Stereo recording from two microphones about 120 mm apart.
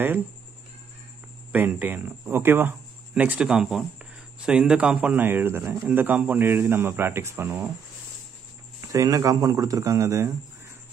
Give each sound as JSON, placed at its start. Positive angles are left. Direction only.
{"t": 1.5, "sound": "a man's voice", "side_deg": -15}
{"t": 8.8, "sound": "speech", "side_deg": -30}